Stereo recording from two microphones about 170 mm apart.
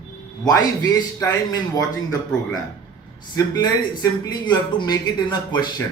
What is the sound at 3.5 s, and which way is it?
Speech, 25° left (ahead or behind).